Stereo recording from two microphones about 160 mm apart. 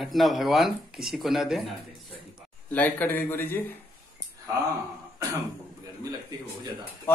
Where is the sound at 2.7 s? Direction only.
10° left (ahead or behind).